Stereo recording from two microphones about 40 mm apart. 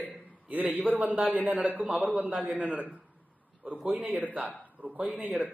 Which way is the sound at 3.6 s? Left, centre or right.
Right.